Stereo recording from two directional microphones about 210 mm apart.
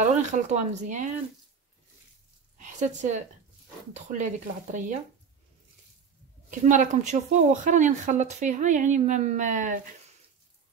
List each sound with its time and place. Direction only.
0.0 s speech: 35° right (ahead or behind)
2.5 s speech: 35° right (ahead or behind)
6.5 s speech: 35° right (ahead or behind)